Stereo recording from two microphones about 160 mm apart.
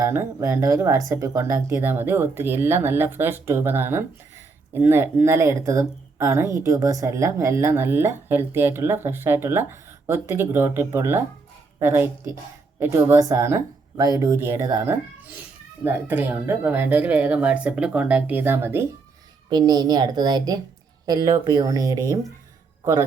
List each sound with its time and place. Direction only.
0.0 s a child's voice: 15° right (ahead or behind)
19.5 s a child's voice: 25° right (ahead or behind)